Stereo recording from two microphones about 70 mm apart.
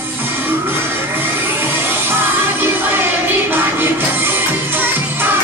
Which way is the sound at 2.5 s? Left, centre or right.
Right.